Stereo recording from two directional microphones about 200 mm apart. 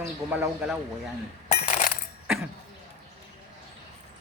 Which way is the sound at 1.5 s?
35° left (ahead or behind).